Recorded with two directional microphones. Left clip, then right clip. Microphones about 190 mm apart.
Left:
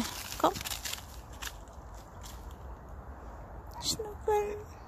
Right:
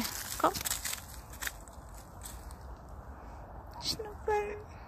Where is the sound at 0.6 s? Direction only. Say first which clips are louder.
Even; 35° right (ahead or behind).